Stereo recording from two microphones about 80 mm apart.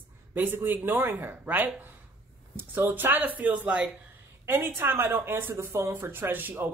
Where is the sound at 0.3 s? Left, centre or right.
Right.